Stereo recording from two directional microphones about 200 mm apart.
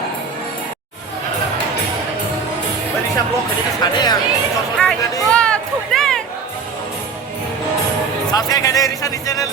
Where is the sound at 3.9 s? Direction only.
20° left (ahead or behind).